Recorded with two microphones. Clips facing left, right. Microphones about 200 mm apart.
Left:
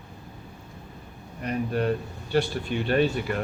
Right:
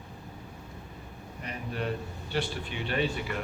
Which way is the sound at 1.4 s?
45° left (ahead or behind).